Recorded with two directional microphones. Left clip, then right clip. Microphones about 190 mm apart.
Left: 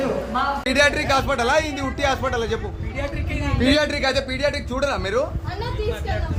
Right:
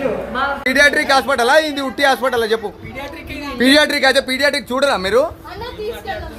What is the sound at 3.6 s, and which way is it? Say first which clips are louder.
A man's voice: right 8 dB; 35° right (ahead or behind).